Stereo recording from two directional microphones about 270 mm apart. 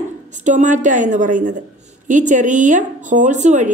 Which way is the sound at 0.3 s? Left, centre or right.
Right.